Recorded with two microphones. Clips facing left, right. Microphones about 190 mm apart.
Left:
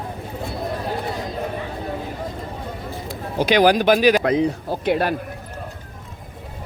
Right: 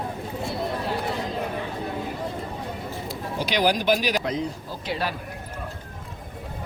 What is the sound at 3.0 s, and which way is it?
Speech, 55° left (ahead or behind).